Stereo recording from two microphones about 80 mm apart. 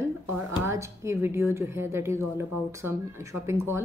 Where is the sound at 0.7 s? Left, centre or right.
Right.